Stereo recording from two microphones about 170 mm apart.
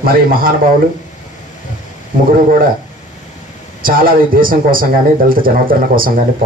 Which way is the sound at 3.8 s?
55° right (ahead or behind).